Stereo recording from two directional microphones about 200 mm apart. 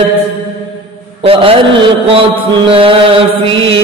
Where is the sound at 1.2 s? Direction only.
30° right (ahead or behind).